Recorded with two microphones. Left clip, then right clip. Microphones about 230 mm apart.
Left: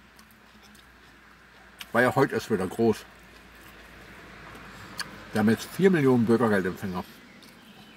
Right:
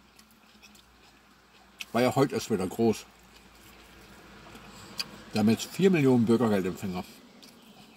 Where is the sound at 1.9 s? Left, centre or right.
Centre.